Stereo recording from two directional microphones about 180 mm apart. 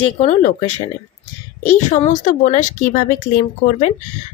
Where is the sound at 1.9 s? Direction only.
45° left (ahead or behind).